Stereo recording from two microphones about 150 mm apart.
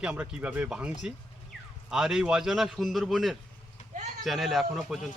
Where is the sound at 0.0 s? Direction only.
5° right (ahead or behind).